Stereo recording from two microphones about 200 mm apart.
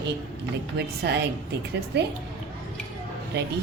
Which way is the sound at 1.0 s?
55° right (ahead or behind).